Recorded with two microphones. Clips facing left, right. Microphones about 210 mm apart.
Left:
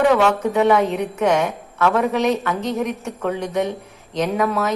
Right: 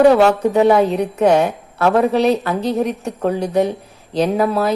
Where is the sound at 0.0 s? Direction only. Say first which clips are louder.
Right 5 dB; 35° right (ahead or behind).